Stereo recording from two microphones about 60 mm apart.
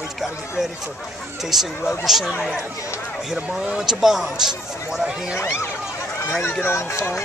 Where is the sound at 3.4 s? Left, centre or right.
Centre.